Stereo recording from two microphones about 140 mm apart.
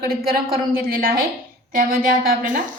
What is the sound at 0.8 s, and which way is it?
Speech, 90° right.